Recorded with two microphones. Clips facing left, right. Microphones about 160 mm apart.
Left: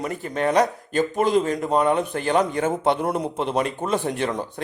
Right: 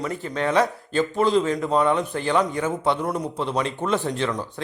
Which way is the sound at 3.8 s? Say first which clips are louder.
Right 3 dB; 10° left (ahead or behind).